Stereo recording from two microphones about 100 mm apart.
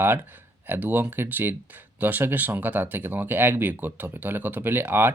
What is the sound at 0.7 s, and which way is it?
Speech, 20° right (ahead or behind).